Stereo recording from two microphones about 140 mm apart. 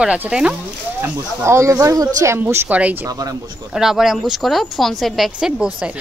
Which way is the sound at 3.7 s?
5° right (ahead or behind).